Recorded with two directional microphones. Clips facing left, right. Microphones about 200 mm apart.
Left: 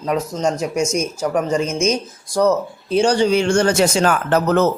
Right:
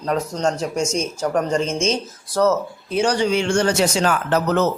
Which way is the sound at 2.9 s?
30° left (ahead or behind).